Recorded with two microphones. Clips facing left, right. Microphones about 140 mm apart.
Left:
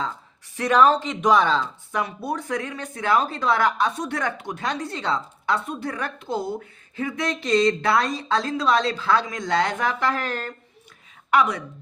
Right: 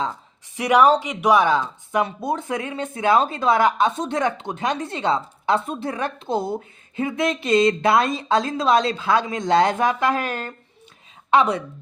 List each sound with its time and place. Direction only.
0.5 s speech: 15° right (ahead or behind)